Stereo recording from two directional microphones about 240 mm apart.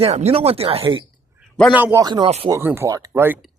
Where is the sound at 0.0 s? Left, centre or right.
Right.